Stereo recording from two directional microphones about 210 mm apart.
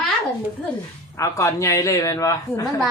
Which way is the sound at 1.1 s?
15° left (ahead or behind).